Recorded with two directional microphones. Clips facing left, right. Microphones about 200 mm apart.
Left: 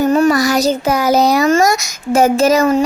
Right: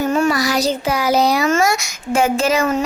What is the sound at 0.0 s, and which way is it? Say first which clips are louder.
A child's voice: left 5 dB; 40° left (ahead or behind).